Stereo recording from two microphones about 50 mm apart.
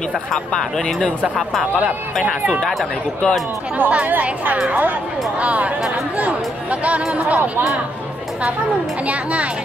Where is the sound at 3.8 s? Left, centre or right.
Right.